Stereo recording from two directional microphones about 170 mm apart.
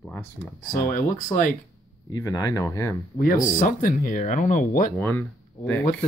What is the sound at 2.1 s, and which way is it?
Speech, 20° left (ahead or behind).